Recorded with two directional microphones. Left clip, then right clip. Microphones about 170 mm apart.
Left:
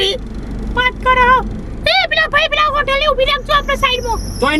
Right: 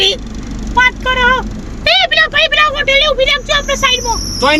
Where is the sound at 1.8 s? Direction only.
25° left (ahead or behind).